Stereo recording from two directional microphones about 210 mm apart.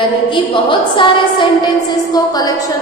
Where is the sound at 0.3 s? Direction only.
25° left (ahead or behind).